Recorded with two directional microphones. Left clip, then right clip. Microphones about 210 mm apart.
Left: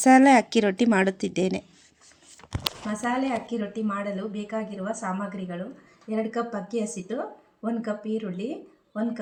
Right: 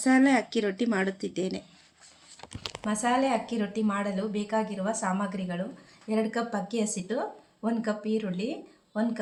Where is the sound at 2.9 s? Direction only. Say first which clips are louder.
Right 3 dB; 20° right (ahead or behind).